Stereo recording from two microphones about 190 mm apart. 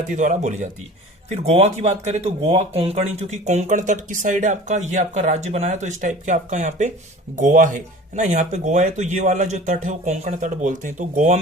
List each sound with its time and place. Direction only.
0.1 s speech: 40° right (ahead or behind)